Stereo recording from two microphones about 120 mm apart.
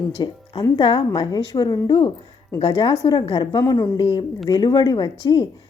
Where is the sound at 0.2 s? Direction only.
35° left (ahead or behind).